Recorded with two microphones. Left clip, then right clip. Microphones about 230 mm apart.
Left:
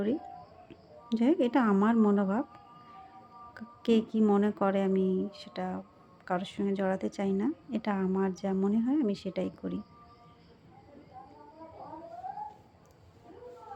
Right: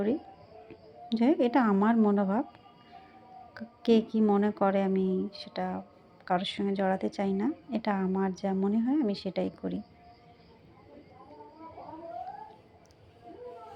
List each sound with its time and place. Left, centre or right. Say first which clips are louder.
1.1 s a woman's voice: right 1 dB; centre